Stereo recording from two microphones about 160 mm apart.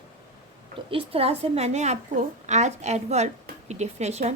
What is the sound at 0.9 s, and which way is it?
A woman's voice, 35° right (ahead or behind).